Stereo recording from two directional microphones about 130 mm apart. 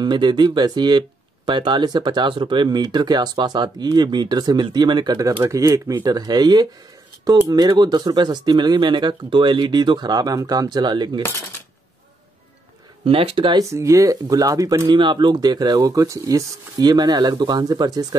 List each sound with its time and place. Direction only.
0.0 s speech: 35° right (ahead or behind)
13.0 s speech: 45° right (ahead or behind)
13.6 s speech: 25° right (ahead or behind)
15.0 s speech: 40° right (ahead or behind)